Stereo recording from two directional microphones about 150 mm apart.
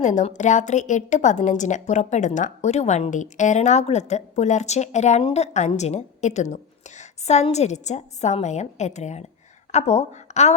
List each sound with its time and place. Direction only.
0.0 s a woman's voice: 50° left (ahead or behind)